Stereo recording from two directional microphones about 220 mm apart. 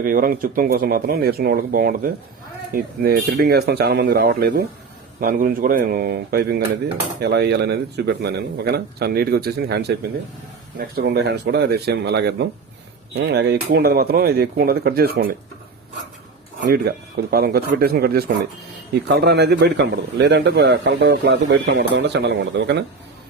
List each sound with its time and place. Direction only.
0.0 s a man's voice: 40° right (ahead or behind)
16.6 s a man's voice: 45° right (ahead or behind)